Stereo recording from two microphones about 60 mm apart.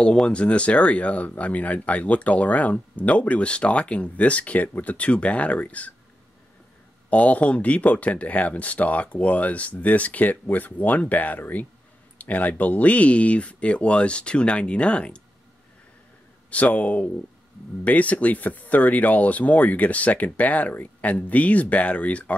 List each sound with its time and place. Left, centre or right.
0.0 s speech: centre
7.1 s speech: left
16.4 s speech: left